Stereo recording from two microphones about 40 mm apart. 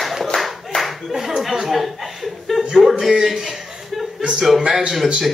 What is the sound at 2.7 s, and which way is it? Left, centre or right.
Speech, centre.